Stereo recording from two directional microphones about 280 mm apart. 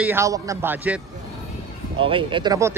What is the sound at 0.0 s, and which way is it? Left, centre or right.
Speech, centre.